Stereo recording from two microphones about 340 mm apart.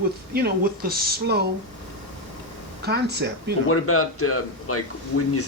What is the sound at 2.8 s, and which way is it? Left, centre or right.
Speech, right.